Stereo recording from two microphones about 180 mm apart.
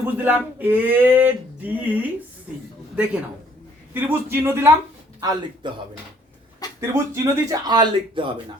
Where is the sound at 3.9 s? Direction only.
10° right (ahead or behind); by 8.3 s 25° right (ahead or behind).